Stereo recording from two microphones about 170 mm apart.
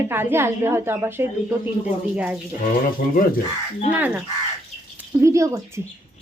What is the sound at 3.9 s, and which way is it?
Speech, 10° right (ahead or behind).